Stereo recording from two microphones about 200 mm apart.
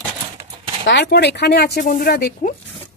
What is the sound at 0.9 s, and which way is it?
Speech, 60° left (ahead or behind).